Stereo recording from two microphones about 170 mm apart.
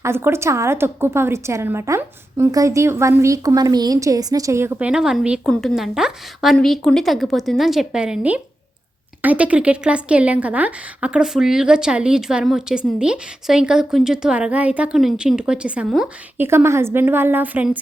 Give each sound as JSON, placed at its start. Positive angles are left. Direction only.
{"t": 0.0, "sound": "a woman's voice", "side_deg": -15}